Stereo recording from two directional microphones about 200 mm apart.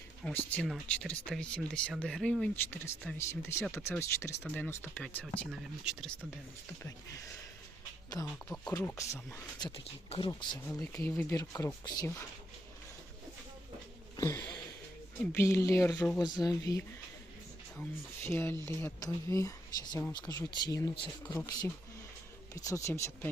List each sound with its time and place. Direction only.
0.3 s speech: 5° left (ahead or behind)
8.1 s speech: 15° left (ahead or behind)
10.8 s speech: 10° left (ahead or behind)
14.2 s a sound: 15° left (ahead or behind)
15.3 s speech: 15° left (ahead or behind)
18.3 s speech: 10° left (ahead or behind)